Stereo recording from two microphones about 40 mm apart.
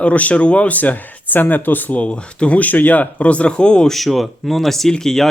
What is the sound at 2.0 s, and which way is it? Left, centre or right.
Speech, left.